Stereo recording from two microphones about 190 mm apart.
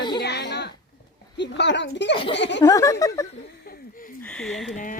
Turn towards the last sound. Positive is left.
turn(degrees=45)  # may be behind; listen again after turning